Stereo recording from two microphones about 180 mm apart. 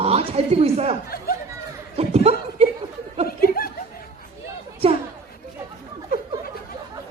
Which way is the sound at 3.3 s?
55° left (ahead or behind).